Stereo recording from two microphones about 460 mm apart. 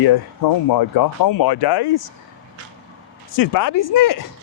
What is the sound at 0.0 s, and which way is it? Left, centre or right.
Speech, left.